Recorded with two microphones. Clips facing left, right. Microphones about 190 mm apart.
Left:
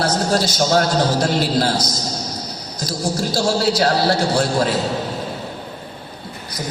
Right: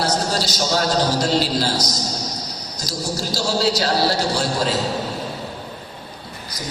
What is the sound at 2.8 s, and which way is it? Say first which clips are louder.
A man's voice: left 4 dB; 55° left (ahead or behind).